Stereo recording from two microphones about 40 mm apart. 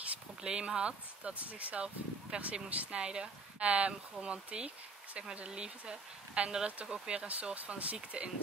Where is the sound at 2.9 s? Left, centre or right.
Right.